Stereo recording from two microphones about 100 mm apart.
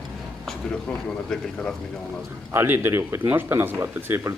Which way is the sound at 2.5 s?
25° right (ahead or behind).